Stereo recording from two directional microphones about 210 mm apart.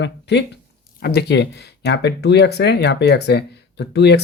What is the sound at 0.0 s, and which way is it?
Speech, 55° left (ahead or behind).